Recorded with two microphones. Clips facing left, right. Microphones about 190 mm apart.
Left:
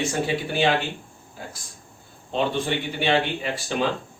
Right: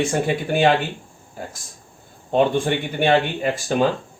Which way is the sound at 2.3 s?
50° right (ahead or behind).